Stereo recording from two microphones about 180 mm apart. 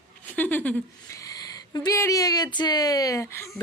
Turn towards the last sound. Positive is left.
turn(degrees=15)  # may be behind; listen again after turning